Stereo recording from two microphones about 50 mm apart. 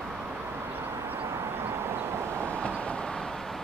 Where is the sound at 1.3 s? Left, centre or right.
Right.